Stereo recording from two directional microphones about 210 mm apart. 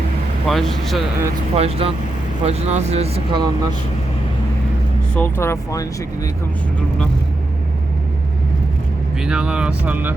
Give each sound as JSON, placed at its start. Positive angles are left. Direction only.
{"t": 0.4, "sound": "speech", "side_deg": 0}
{"t": 1.5, "sound": "speech", "side_deg": -30}
{"t": 5.1, "sound": "speech", "side_deg": 10}
{"t": 9.2, "sound": "speech", "side_deg": -5}